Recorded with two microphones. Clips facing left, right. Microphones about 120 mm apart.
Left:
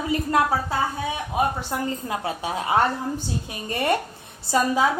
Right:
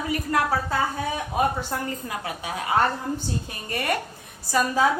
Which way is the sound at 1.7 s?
25° left (ahead or behind).